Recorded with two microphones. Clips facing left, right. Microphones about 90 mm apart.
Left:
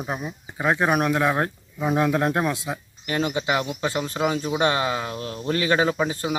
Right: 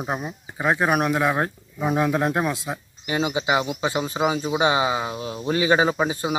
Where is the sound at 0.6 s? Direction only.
5° right (ahead or behind).